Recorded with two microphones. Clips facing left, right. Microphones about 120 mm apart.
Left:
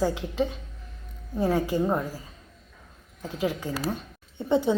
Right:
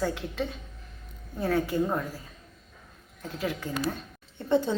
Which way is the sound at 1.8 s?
20° left (ahead or behind).